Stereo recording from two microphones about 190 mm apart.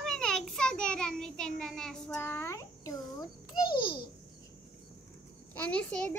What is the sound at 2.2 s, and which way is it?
A child's voice, 15° left (ahead or behind).